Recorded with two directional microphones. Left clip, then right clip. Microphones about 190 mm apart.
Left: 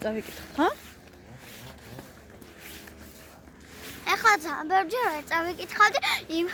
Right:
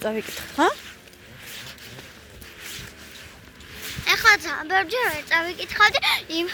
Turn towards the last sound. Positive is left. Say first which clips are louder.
# right 4 dB
turn(degrees=5)  # may be behind; listen again after turning